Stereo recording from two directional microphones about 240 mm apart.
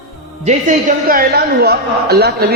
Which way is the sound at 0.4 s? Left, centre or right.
Right.